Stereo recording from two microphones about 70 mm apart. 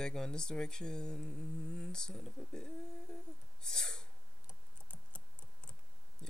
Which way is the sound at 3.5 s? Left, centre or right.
Centre.